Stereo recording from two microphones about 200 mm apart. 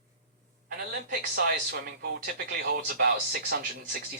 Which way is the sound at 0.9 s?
50° right (ahead or behind).